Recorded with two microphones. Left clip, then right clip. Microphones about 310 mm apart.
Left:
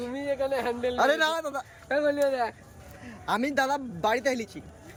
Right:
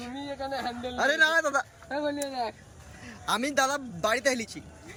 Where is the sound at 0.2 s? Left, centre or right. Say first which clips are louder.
Left 7 dB; centre.